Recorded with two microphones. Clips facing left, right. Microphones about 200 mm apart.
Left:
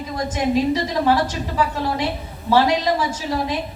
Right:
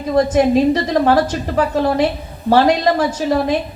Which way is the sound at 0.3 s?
55° right (ahead or behind).